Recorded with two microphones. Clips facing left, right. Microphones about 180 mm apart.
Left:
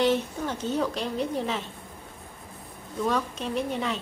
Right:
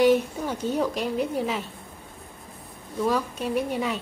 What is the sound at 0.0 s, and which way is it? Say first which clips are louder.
A woman's voice: right 4 dB; 10° right (ahead or behind).